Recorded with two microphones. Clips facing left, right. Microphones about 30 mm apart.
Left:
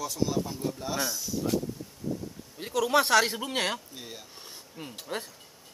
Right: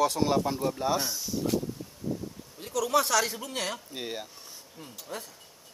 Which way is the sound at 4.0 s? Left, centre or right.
Right.